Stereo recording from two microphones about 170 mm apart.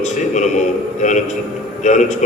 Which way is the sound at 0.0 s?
45° left (ahead or behind).